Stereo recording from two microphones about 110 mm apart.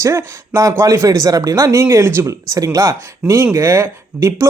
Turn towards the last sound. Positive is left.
turn(degrees=-25)  # may be behind; listen again after turning